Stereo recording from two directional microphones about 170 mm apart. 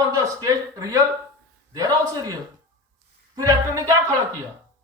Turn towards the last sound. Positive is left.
turn(degrees=-20)  # may be behind; listen again after turning